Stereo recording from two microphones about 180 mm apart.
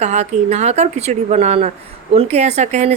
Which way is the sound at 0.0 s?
40° right (ahead or behind).